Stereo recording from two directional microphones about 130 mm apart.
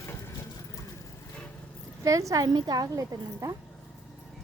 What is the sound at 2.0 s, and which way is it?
A woman's voice, 25° right (ahead or behind).